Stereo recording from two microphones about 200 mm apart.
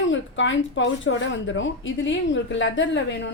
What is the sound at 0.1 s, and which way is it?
Speech, 65° left (ahead or behind).